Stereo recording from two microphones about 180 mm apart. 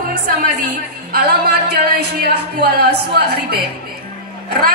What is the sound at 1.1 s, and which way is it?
Speech, 60° right (ahead or behind).